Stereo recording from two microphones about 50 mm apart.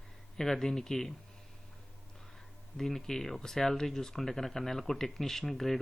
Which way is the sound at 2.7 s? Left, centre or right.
Centre.